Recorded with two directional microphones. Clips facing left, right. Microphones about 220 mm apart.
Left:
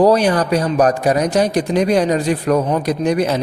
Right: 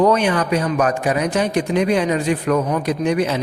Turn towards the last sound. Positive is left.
turn(degrees=40)  # may be behind; listen again after turning